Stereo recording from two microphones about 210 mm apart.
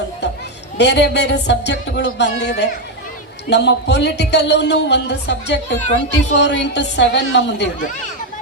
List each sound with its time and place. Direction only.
0.8 s a man's voice: 55° left (ahead or behind)